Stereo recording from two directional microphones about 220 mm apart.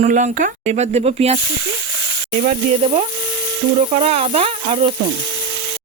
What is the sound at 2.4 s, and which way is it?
Speech, 30° right (ahead or behind).